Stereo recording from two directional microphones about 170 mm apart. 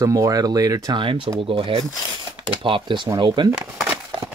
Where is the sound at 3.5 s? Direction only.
5° right (ahead or behind).